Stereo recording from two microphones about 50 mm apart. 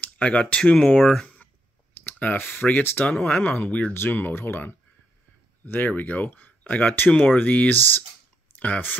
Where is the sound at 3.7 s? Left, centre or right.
Left.